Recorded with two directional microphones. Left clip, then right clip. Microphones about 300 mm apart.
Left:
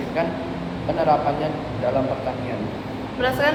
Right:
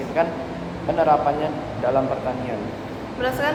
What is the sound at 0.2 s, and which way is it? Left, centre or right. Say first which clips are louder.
Speech: right 3 dB; centre.